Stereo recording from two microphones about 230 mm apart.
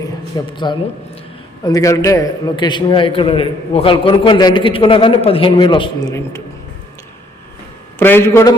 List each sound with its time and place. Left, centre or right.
0.5 s a man's voice: centre
7.9 s a man's voice: centre